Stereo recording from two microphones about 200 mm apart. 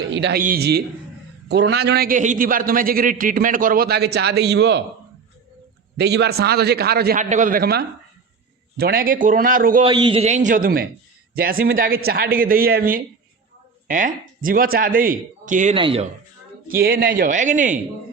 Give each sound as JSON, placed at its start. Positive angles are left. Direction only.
{"t": 0.2, "sound": "a man's voice", "side_deg": -55}
{"t": 6.0, "sound": "a man's voice", "side_deg": -55}
{"t": 9.8, "sound": "a man's voice", "side_deg": -25}
{"t": 15.7, "sound": "speech", "side_deg": -25}
{"t": 16.6, "sound": "a man's voice", "side_deg": -45}